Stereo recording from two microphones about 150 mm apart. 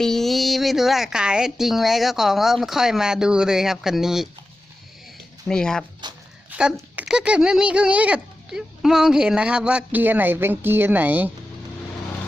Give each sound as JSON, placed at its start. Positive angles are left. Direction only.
{"t": 0.0, "sound": "a woman's voice", "side_deg": 0}
{"t": 5.5, "sound": "a woman's voice", "side_deg": 5}
{"t": 6.0, "sound": "speech", "side_deg": -30}
{"t": 6.5, "sound": "speech", "side_deg": -5}